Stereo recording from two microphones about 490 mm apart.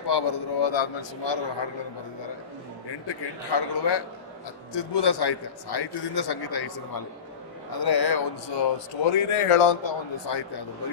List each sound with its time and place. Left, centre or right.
0.0 s a man's voice: left
2.9 s a man's voice: left
8.7 s speech: left